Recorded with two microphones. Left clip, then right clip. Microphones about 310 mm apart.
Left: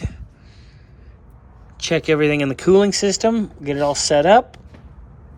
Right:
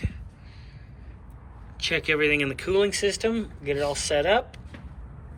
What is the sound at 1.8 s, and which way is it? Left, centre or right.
Speech, centre.